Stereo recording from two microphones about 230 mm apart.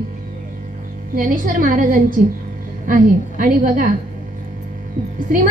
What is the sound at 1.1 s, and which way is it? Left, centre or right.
A woman's voice, right.